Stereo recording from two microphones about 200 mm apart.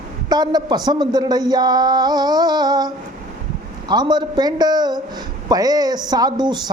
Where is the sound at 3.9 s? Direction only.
20° right (ahead or behind).